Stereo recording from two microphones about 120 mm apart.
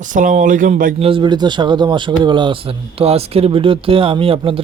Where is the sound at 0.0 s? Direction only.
90° right; by 1.2 s 55° right (ahead or behind).